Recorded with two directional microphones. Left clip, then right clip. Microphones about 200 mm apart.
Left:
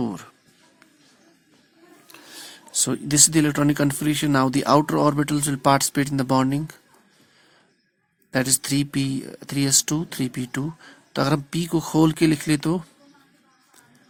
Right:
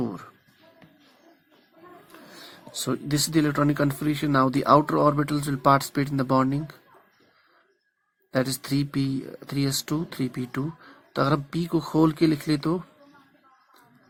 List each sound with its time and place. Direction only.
0.0 s speech: 45° left (ahead or behind)
2.7 s speech: 40° left (ahead or behind)
8.3 s speech: 40° left (ahead or behind)